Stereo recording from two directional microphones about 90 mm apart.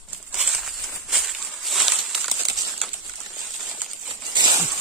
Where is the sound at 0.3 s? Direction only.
10° right (ahead or behind).